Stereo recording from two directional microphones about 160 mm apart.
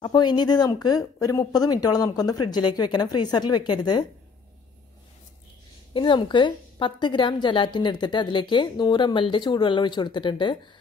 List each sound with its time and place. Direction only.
0.0 s a woman's voice: 25° left (ahead or behind)
5.9 s a woman's voice: 30° left (ahead or behind)